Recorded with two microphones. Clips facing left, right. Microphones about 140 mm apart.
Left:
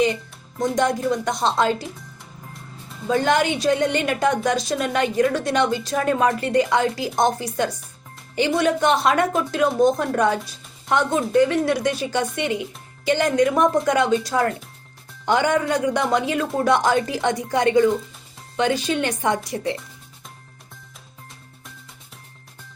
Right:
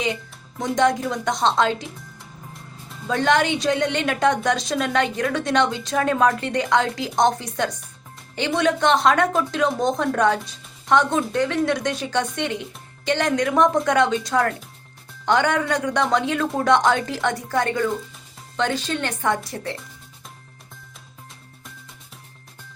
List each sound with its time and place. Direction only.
0.6 s a woman's voice: centre (ahead or behind)
2.9 s a woman's voice: 5° left (ahead or behind)
17.2 s speech: 15° left (ahead or behind)